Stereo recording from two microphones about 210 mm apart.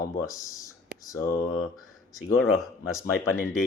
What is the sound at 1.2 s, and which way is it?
Speech, 40° left (ahead or behind).